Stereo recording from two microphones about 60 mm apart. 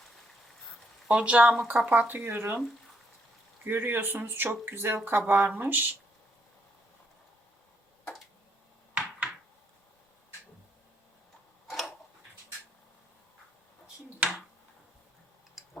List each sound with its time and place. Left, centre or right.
1.0 s speech: centre; by 2.6 s right
3.6 s speech: right
11.7 s tick-tock: centre
14.2 s finger snapping: centre